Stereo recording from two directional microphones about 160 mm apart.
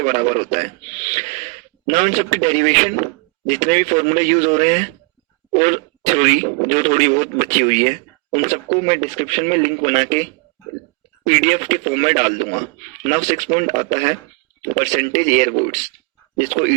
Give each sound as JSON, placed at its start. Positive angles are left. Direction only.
{"t": 0.0, "sound": "speech", "side_deg": -45}
{"t": 11.3, "sound": "speech", "side_deg": -45}